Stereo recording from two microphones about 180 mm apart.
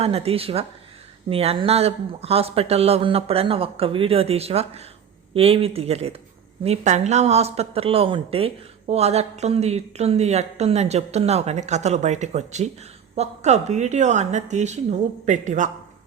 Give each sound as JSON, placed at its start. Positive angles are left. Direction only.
{"t": 0.0, "sound": "speech", "side_deg": -35}